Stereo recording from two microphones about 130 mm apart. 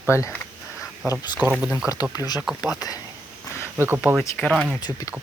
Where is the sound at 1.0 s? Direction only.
10° right (ahead or behind).